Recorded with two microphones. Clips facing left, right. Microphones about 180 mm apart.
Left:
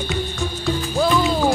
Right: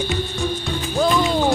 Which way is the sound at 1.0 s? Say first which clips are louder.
Right 1 dB; centre (ahead or behind).